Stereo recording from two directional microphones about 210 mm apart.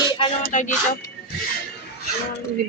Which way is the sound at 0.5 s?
35° left (ahead or behind).